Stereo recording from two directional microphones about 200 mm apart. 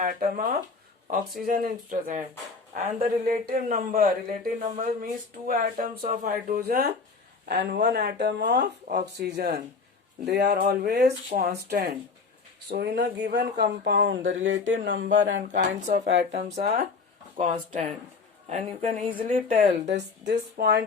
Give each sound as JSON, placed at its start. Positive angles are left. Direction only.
{"t": 0.0, "sound": "speech", "side_deg": -45}
{"t": 15.5, "sound": "a woman's voice", "side_deg": -40}
{"t": 16.0, "sound": "speech", "side_deg": -60}
{"t": 17.3, "sound": "a woman's voice", "side_deg": -35}
{"t": 19.9, "sound": "speech", "side_deg": -60}